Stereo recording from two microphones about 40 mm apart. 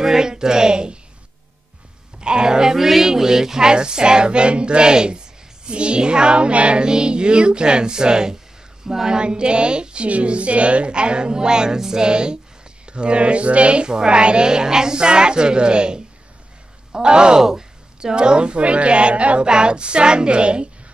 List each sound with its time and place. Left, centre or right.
0.0 s a woman's voice: centre
2.1 s speech: right